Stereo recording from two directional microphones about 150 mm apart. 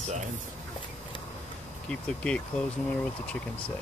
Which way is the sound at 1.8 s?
5° left (ahead or behind).